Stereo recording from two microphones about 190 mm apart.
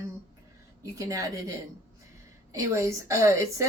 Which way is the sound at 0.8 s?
20° right (ahead or behind).